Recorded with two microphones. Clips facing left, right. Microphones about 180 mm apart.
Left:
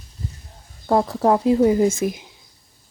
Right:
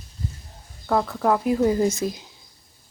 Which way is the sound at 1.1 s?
25° left (ahead or behind).